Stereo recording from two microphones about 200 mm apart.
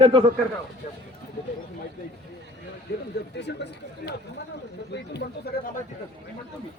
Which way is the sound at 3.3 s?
60° left (ahead or behind).